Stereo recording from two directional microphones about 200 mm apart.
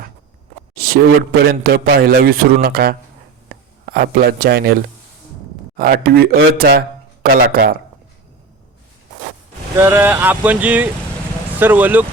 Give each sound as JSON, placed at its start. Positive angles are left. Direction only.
{"t": 0.8, "sound": "a man's voice", "side_deg": -45}
{"t": 9.7, "sound": "speech", "side_deg": -10}